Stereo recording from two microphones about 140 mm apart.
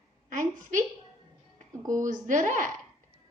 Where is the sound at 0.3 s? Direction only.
65° right (ahead or behind).